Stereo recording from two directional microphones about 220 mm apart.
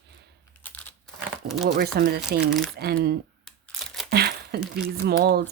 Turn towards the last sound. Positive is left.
turn(degrees=-45)  # may be behind; listen again after turning